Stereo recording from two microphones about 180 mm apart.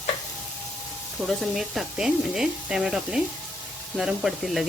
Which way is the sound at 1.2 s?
Centre (ahead or behind).